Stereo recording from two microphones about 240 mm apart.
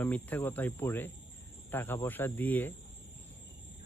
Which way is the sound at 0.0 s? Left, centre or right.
Centre.